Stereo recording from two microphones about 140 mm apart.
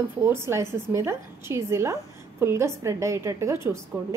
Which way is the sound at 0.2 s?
20° right (ahead or behind).